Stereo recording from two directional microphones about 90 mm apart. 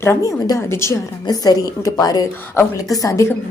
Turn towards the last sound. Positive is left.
turn(degrees=35)  # may be behind; listen again after turning